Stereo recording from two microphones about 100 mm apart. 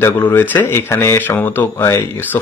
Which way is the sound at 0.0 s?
25° left (ahead or behind).